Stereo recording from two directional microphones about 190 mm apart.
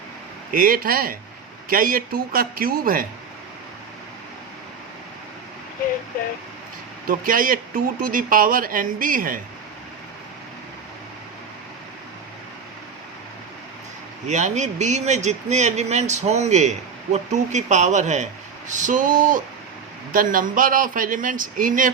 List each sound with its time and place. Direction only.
0.5 s a man's voice: 50° right (ahead or behind)
7.1 s a man's voice: 45° right (ahead or behind)
14.3 s a man's voice: 40° right (ahead or behind)